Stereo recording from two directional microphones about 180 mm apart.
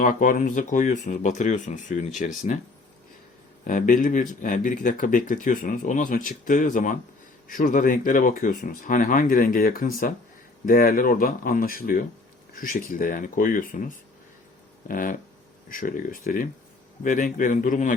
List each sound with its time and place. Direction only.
0.0 s speech: 50° left (ahead or behind)
3.6 s speech: 45° left (ahead or behind)